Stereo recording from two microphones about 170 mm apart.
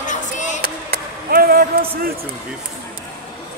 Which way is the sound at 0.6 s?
60° right (ahead or behind).